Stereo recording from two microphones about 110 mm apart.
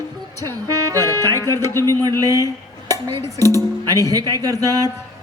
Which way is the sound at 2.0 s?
35° right (ahead or behind).